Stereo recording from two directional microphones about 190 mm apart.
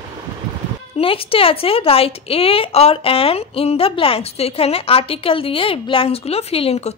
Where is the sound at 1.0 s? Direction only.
30° left (ahead or behind).